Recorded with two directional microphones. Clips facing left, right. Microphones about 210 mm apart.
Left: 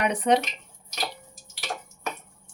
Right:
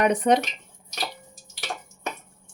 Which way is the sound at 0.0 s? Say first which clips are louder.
Right 3 dB; 45° right (ahead or behind).